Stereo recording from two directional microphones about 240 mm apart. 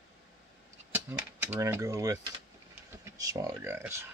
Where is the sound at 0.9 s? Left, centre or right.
Centre.